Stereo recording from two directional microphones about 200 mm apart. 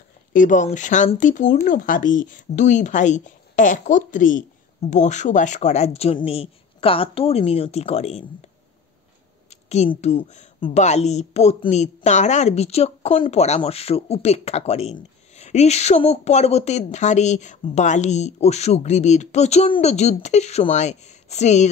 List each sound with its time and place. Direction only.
0.3 s speech: 40° left (ahead or behind)
9.5 s speech: 35° left (ahead or behind)